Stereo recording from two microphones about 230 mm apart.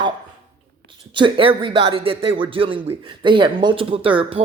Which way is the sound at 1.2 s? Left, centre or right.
Right.